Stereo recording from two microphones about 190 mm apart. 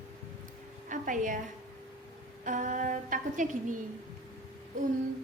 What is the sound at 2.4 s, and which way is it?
Music, 40° right (ahead or behind).